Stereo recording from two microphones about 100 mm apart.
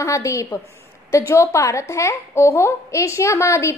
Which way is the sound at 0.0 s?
30° left (ahead or behind).